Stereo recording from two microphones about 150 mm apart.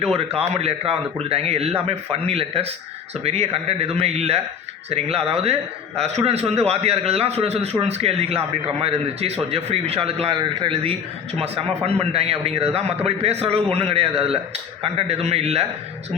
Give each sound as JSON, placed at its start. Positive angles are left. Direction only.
{"t": 0.2, "sound": "a man's voice", "side_deg": -40}